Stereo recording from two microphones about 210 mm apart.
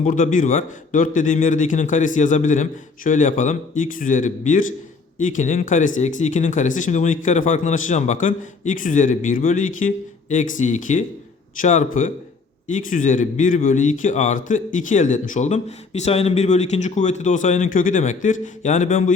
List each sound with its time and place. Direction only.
0.0 s a man's voice: 40° left (ahead or behind)